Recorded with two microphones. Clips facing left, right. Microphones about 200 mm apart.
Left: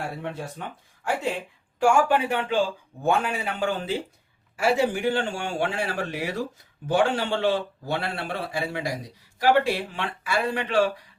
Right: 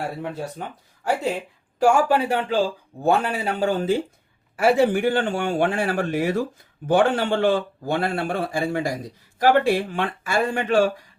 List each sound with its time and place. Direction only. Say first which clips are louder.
0.6 s a man's voice: right 3 dB; 40° right (ahead or behind)
4.5 s a man's voice: right 5 dB; 55° right (ahead or behind)